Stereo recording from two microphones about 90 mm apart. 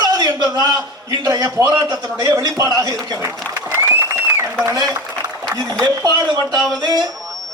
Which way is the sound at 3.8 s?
30° right (ahead or behind).